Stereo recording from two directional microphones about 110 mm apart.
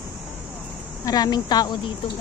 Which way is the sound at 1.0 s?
35° left (ahead or behind).